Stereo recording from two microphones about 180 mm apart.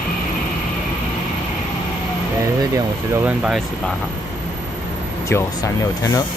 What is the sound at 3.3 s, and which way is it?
Speech, centre (ahead or behind).